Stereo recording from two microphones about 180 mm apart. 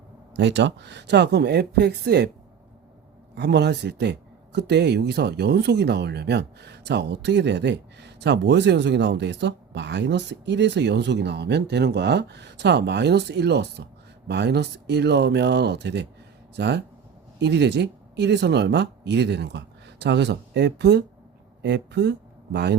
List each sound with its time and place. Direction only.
0.3 s speech: 75° right (ahead or behind)
3.3 s speech: 70° right (ahead or behind)